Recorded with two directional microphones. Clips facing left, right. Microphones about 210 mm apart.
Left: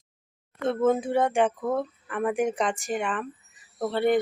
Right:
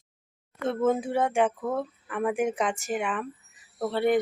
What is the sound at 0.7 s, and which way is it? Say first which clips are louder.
Speech: left 2 dB; 10° right (ahead or behind).